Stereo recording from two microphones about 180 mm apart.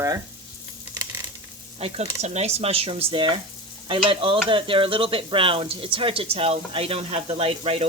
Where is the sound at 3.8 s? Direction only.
30° right (ahead or behind).